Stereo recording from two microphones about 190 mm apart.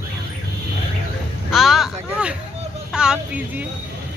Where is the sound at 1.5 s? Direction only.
Centre (ahead or behind).